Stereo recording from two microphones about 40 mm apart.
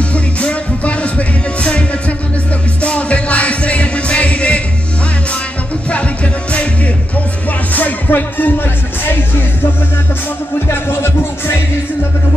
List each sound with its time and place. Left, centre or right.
0.1 s music: left
5.9 s music: left
7.7 s music: left
10.7 s music: left